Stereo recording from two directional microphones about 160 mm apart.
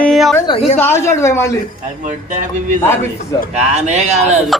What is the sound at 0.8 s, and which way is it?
Speech, 15° left (ahead or behind).